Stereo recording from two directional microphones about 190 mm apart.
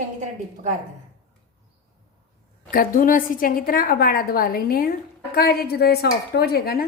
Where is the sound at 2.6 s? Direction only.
45° left (ahead or behind).